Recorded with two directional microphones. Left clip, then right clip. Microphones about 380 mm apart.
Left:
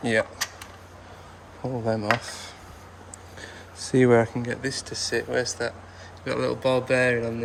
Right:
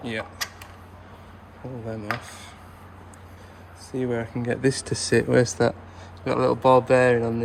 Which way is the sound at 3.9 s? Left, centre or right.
Centre.